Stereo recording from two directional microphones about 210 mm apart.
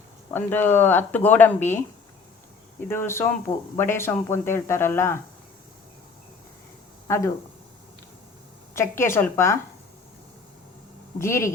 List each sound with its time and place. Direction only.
0.3 s speech: 10° left (ahead or behind)
2.9 s speech: 10° left (ahead or behind)
7.1 s speech: 15° left (ahead or behind)
8.7 s speech: 10° left (ahead or behind)
11.2 s speech: 15° left (ahead or behind)